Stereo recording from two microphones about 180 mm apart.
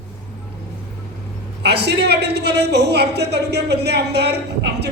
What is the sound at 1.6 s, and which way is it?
A woman's voice, 65° right (ahead or behind).